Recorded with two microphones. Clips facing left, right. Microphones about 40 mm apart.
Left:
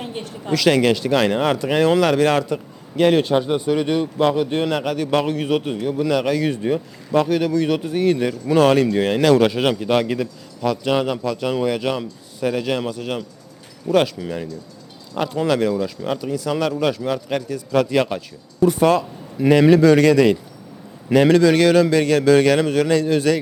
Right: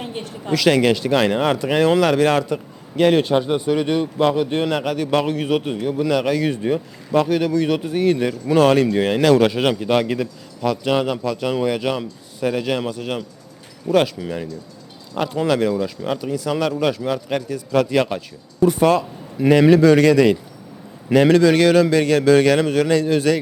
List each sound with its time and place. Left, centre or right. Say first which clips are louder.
0.0 s a man's voice: even; centre